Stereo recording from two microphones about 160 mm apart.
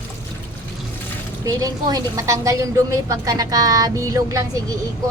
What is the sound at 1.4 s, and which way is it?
A woman's voice, 25° right (ahead or behind).